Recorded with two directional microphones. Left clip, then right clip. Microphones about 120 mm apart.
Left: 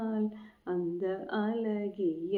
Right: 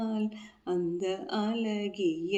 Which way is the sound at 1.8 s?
25° right (ahead or behind).